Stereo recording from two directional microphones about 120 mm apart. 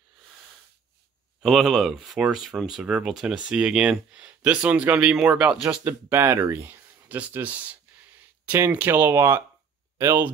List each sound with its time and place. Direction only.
1.4 s speech: centre (ahead or behind)
5.9 s speech: 20° right (ahead or behind)